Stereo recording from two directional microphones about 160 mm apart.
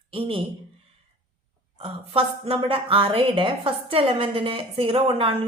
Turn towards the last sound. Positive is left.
turn(degrees=-35)  # may be behind; listen again after turning